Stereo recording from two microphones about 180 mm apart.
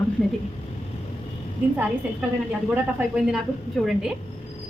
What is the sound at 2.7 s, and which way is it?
A woman's voice, 5° right (ahead or behind).